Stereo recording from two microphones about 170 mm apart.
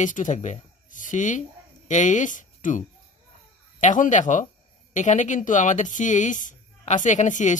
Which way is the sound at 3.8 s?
50° left (ahead or behind).